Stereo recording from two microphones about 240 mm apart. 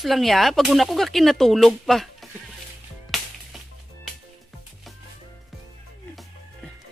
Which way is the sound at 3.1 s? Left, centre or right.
Centre.